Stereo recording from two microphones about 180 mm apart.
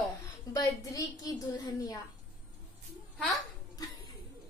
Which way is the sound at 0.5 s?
20° left (ahead or behind).